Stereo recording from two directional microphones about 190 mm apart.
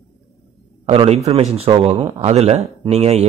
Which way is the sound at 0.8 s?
30° right (ahead or behind).